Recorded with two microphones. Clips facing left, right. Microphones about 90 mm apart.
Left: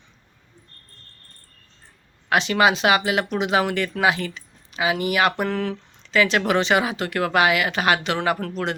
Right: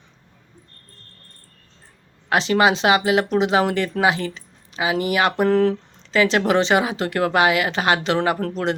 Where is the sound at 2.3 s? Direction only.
30° right (ahead or behind).